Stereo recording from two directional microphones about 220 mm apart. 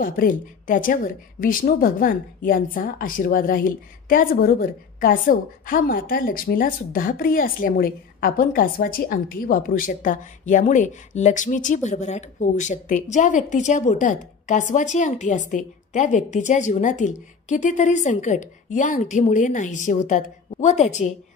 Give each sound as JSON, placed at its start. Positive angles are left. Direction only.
{"t": 0.0, "sound": "a woman's voice", "side_deg": 40}